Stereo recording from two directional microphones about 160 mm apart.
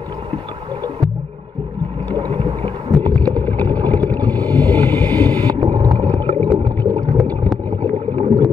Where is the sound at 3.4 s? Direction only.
10° left (ahead or behind).